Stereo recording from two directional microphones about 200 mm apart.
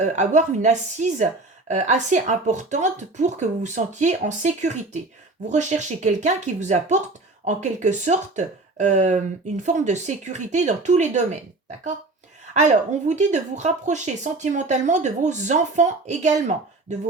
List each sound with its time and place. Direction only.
0.0 s a woman's voice: 35° right (ahead or behind)
12.5 s a woman's voice: 35° right (ahead or behind)